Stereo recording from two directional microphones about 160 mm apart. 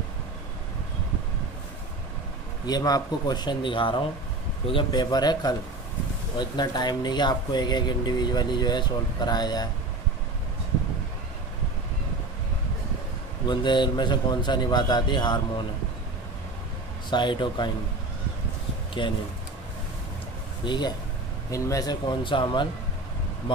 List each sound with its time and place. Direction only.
2.6 s speech: 25° left (ahead or behind)
13.5 s speech: 30° left (ahead or behind)
17.1 s speech: 30° left (ahead or behind)
19.0 s speech: 30° left (ahead or behind)
20.6 s speech: 30° left (ahead or behind)